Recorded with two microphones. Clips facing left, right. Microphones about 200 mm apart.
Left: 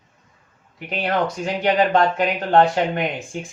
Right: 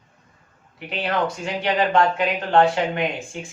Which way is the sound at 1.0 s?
45° left (ahead or behind).